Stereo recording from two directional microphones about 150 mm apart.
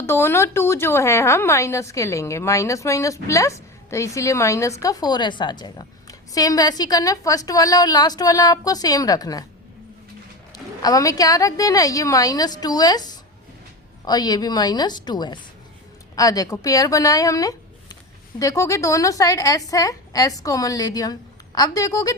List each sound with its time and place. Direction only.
0.0 s a woman's voice: 15° left (ahead or behind)
10.5 s a woman's voice: 25° left (ahead or behind)